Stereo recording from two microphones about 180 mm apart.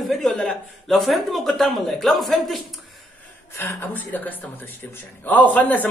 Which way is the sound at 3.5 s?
10° left (ahead or behind).